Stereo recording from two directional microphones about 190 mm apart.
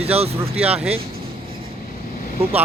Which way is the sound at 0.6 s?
5° right (ahead or behind).